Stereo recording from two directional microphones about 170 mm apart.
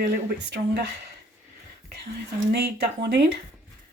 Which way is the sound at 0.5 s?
75° right (ahead or behind).